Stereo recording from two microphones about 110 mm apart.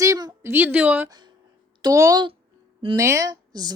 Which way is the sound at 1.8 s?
35° right (ahead or behind).